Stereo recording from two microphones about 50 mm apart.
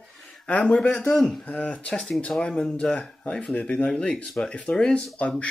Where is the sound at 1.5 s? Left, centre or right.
Left.